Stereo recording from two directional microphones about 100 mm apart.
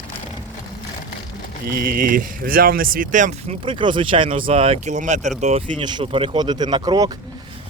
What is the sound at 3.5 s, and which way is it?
Speech, 60° right (ahead or behind).